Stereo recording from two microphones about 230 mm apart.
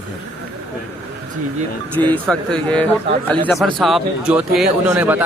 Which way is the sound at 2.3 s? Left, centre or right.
Centre.